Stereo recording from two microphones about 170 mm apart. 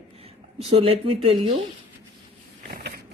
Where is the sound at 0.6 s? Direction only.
35° right (ahead or behind).